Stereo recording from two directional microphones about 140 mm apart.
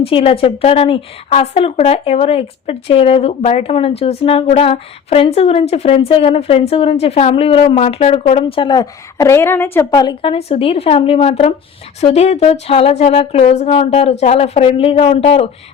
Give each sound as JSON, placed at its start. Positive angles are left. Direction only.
{"t": 0.0, "sound": "a woman's voice", "side_deg": 45}
{"t": 9.9, "sound": "a woman's voice", "side_deg": 30}
{"t": 10.2, "sound": "a woman's voice", "side_deg": 45}